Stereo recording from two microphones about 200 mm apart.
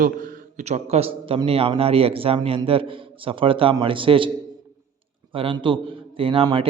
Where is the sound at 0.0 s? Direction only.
45° right (ahead or behind); by 4.3 s 25° right (ahead or behind).